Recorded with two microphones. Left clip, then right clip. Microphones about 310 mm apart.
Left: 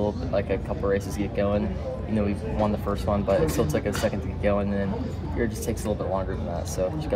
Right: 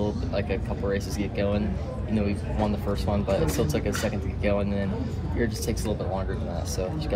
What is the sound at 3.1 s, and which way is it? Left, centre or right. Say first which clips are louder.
Speech: left 3 dB; centre.